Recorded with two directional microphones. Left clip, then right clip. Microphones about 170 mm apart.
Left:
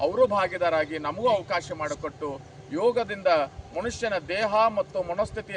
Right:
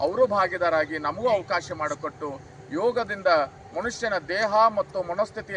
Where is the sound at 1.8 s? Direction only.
30° left (ahead or behind).